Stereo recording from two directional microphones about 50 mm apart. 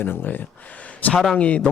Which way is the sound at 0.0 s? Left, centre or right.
Left.